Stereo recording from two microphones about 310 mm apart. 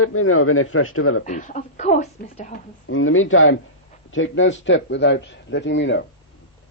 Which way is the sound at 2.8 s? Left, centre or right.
Left.